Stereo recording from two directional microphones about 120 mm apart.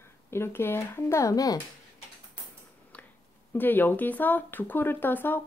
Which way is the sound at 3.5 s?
15° left (ahead or behind).